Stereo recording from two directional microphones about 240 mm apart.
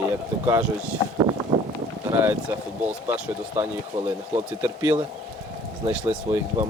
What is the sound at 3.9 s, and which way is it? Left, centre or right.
Speech, right.